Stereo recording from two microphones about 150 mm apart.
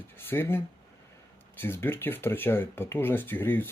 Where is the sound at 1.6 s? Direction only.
15° left (ahead or behind).